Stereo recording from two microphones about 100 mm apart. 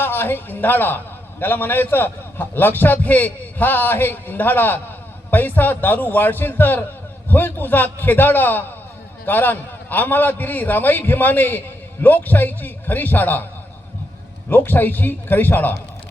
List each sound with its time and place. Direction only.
0.0 s a man's voice: 20° left (ahead or behind)
14.5 s a man's voice: 20° left (ahead or behind)